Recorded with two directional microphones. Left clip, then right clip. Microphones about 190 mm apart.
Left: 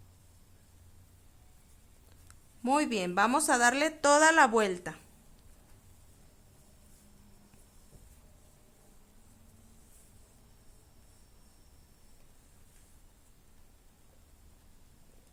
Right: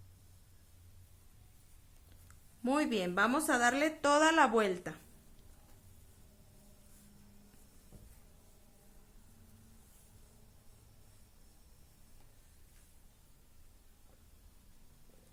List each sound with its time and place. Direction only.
2.2 s a woman's voice: 30° left (ahead or behind)